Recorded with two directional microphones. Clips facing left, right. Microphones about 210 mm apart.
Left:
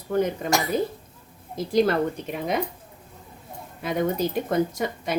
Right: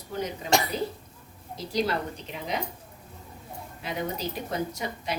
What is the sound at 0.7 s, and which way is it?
Speech, 50° left (ahead or behind).